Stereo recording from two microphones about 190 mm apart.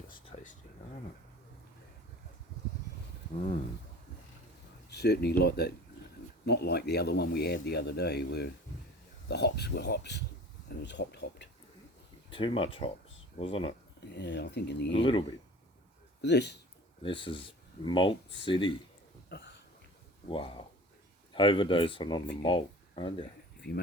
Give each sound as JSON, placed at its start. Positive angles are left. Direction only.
{"t": 4.9, "sound": "speech", "side_deg": 60}
{"t": 12.3, "sound": "speech", "side_deg": 25}
{"t": 14.1, "sound": "speech", "side_deg": 65}
{"t": 14.9, "sound": "speech", "side_deg": 25}
{"t": 16.2, "sound": "speech", "side_deg": 65}
{"t": 17.0, "sound": "speech", "side_deg": 25}
{"t": 19.3, "sound": "a sound", "side_deg": 60}
{"t": 20.2, "sound": "speech", "side_deg": 30}
{"t": 23.6, "sound": "speech", "side_deg": 60}